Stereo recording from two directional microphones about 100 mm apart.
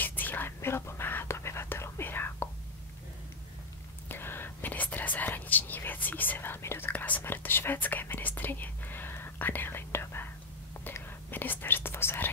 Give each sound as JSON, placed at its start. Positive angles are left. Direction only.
{"t": 0.0, "sound": "whispering", "side_deg": 20}
{"t": 4.1, "sound": "whispering", "side_deg": 20}